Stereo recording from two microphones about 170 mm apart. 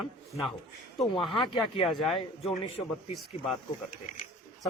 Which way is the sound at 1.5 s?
30° left (ahead or behind).